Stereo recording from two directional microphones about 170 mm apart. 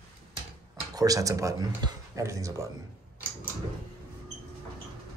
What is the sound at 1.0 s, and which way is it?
Speech, 20° right (ahead or behind).